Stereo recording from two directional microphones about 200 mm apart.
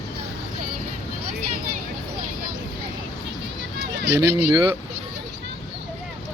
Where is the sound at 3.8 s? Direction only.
60° right (ahead or behind).